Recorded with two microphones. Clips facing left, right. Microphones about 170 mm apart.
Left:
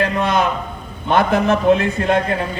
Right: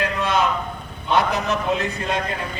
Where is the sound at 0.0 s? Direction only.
55° left (ahead or behind).